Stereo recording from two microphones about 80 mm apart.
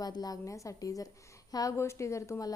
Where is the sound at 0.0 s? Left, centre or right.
Left.